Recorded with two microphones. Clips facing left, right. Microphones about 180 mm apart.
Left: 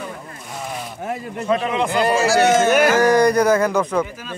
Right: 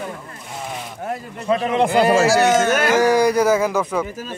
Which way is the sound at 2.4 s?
15° left (ahead or behind).